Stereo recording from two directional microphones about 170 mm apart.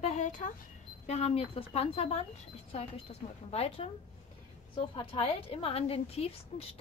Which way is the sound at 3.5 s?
35° left (ahead or behind).